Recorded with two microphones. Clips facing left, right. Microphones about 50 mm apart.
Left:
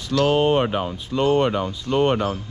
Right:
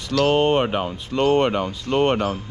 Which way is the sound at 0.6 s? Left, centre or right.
Right.